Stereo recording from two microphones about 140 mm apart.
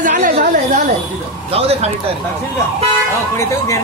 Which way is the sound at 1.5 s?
45° right (ahead or behind).